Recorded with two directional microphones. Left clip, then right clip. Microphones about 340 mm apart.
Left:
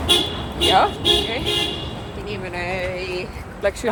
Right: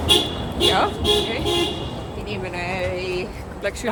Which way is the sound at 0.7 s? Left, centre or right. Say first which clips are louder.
Left 3 dB; centre.